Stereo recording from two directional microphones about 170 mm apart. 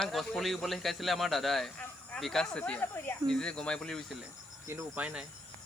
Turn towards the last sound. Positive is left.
turn(degrees=-5)  # may be behind; listen again after turning